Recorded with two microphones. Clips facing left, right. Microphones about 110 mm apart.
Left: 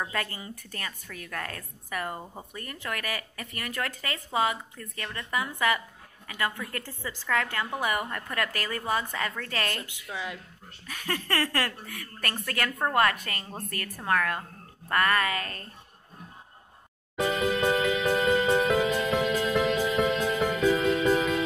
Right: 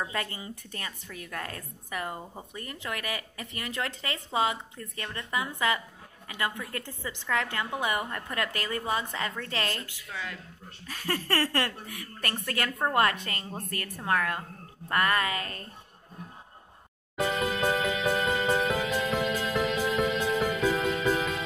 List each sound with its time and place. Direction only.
0.1 s speech: 25° right (ahead or behind)
9.8 s a woman's voice: 20° left (ahead or behind)
10.9 s speech: 35° right (ahead or behind)
17.2 s music: centre (ahead or behind)